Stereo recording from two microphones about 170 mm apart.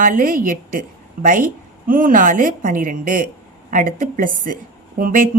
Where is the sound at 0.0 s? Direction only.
55° right (ahead or behind).